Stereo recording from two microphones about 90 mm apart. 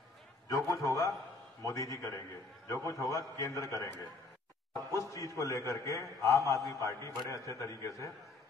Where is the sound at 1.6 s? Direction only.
35° left (ahead or behind).